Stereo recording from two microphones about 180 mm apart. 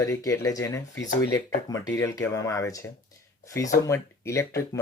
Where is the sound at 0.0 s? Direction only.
15° left (ahead or behind).